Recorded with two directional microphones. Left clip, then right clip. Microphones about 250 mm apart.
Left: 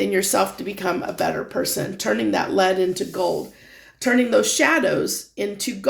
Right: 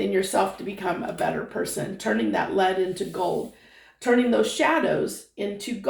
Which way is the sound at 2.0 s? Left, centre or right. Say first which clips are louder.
Left 3 dB; left.